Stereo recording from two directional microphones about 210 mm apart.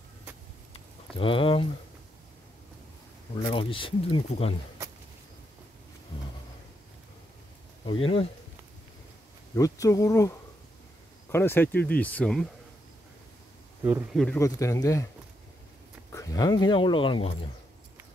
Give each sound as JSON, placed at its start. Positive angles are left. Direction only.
{"t": 1.1, "sound": "speech", "side_deg": 25}
{"t": 3.4, "sound": "speech", "side_deg": 25}
{"t": 7.8, "sound": "speech", "side_deg": 25}
{"t": 9.6, "sound": "speech", "side_deg": 15}
{"t": 14.1, "sound": "speech", "side_deg": 5}
{"t": 14.4, "sound": "speech", "side_deg": 15}
{"t": 16.1, "sound": "speech", "side_deg": 15}